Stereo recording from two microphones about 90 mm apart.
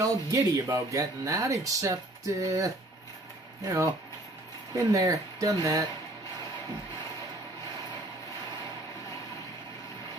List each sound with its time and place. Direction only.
0.0 s speech: 40° right (ahead or behind)